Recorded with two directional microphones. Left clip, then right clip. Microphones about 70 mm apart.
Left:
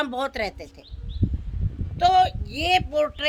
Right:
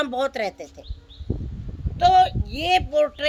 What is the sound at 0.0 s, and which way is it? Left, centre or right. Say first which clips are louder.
Speech: right 2 dB; left.